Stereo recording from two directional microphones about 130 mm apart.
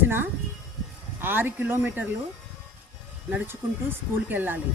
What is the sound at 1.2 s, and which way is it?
Speech, 15° right (ahead or behind).